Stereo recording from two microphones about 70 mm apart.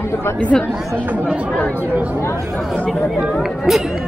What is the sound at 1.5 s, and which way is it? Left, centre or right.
Speech, left.